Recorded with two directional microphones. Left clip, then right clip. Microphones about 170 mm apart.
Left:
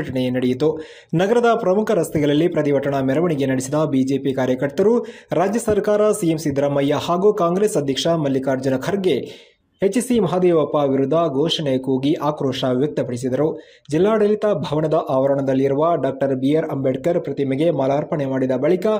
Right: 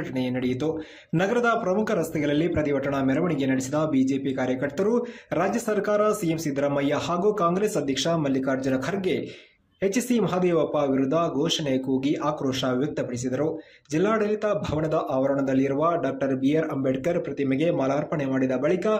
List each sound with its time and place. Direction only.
0.1 s speech: 30° left (ahead or behind)